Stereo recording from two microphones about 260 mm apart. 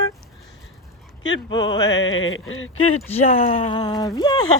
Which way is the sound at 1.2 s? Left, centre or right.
Left.